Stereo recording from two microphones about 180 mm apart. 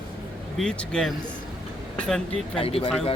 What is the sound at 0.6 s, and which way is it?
Speech, 5° left (ahead or behind).